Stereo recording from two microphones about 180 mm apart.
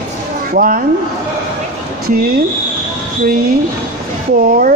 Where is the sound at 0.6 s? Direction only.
50° right (ahead or behind).